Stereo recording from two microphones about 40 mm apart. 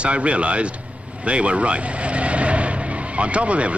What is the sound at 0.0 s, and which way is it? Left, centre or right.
Speech, right.